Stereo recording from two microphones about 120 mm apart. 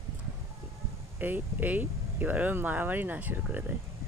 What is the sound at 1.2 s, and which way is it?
Speech, 15° right (ahead or behind).